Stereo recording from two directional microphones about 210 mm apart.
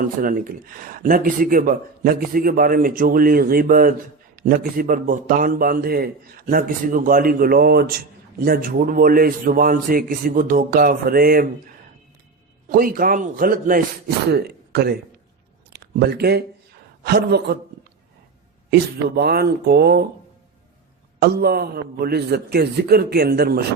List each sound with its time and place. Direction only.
0.0 s a man's voice: 40° right (ahead or behind)
12.6 s a man's voice: 40° right (ahead or behind)
18.7 s a man's voice: 50° right (ahead or behind)
21.2 s a man's voice: 50° right (ahead or behind)